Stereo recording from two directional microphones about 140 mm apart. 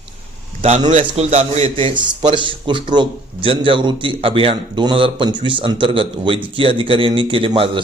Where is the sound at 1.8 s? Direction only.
35° right (ahead or behind).